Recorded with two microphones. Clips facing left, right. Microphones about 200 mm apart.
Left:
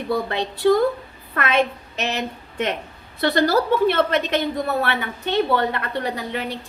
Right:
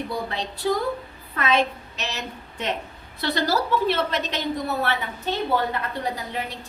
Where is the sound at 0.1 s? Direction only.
60° left (ahead or behind).